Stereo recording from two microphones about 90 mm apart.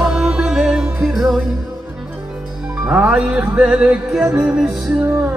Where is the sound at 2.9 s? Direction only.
10° right (ahead or behind).